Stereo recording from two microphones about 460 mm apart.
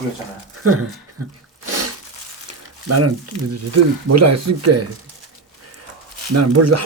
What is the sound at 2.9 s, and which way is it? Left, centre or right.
Speech, right.